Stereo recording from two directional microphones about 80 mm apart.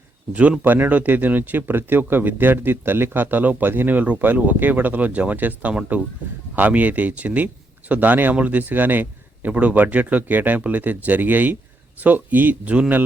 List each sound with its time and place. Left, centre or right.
0.6 s speech: right